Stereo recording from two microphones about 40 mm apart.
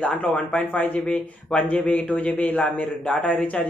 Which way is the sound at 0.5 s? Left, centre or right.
Left.